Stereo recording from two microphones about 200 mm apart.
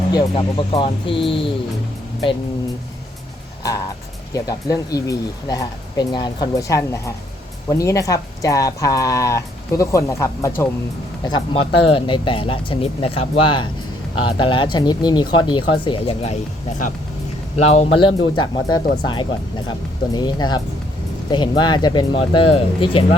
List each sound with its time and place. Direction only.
0.1 s speech: 25° left (ahead or behind)
4.4 s speech: 20° left (ahead or behind)
11.3 s speech: 25° left (ahead or behind)
17.6 s speech: 35° left (ahead or behind)